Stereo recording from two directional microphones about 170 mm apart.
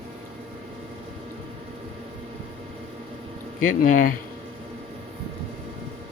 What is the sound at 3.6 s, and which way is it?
Speech, 50° left (ahead or behind).